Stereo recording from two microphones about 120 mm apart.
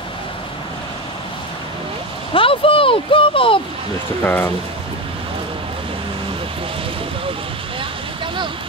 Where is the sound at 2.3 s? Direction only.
50° left (ahead or behind).